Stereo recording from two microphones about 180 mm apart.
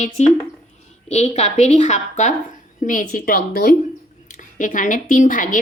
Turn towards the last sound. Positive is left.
turn(degrees=45)  # may be behind; listen again after turning